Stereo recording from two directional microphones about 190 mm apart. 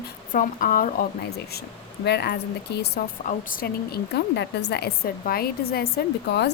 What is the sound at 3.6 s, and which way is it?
A woman's voice, 55° left (ahead or behind).